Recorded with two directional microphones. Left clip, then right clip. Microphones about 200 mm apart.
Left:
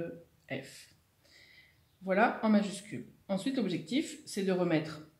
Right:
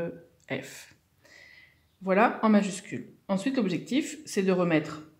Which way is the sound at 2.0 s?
45° right (ahead or behind).